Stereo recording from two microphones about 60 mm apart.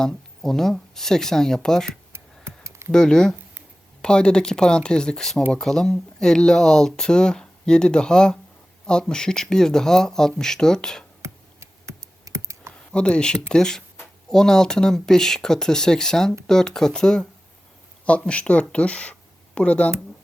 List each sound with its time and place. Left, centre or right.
0.0 s speech: centre
2.1 s a sound: right
2.9 s speech: centre
11.2 s computer keyboard: right
12.7 s speech: centre
18.3 s speech: centre